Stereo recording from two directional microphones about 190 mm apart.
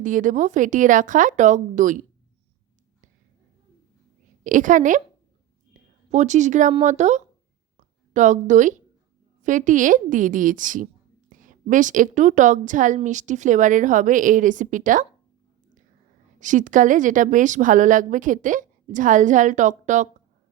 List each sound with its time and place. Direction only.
0.0 s a woman's voice: 45° right (ahead or behind)
4.4 s a woman's voice: 45° right (ahead or behind)
5.7 s a sound: 40° right (ahead or behind)
6.1 s a woman's voice: 35° right (ahead or behind)
7.8 s a sound: 40° right (ahead or behind)
9.4 s a woman's voice: 40° right (ahead or behind)
16.4 s a woman's voice: 40° right (ahead or behind)